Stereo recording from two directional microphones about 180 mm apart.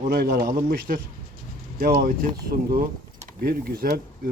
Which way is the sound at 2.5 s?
50° right (ahead or behind).